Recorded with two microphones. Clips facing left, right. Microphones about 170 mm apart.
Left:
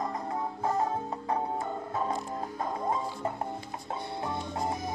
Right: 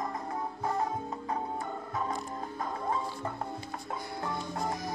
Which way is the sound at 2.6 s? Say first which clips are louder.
Left 2 dB; 20° left (ahead or behind).